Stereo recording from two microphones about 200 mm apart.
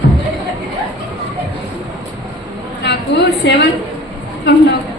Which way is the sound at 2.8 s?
60° left (ahead or behind).